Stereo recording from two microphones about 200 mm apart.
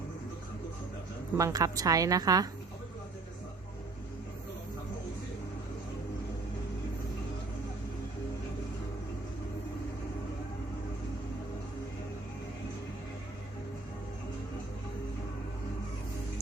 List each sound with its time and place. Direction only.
1.4 s a woman's voice: 15° right (ahead or behind)